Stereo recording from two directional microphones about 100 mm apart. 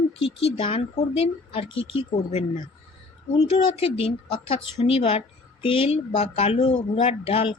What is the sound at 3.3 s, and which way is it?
Speech, 75° left (ahead or behind).